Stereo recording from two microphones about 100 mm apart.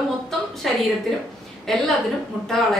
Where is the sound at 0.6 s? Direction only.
Centre (ahead or behind).